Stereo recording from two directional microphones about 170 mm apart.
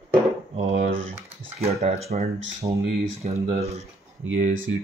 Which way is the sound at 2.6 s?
25° right (ahead or behind).